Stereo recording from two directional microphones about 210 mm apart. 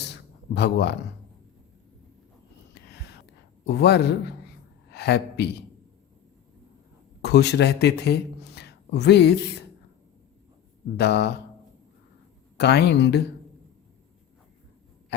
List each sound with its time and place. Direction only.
0.0 s a sound: 55° left (ahead or behind)
3.7 s a man's voice: 50° left (ahead or behind)
7.2 s a man's voice: 55° left (ahead or behind)
10.9 s a man's voice: 50° left (ahead or behind)
12.5 s a man's voice: 50° left (ahead or behind)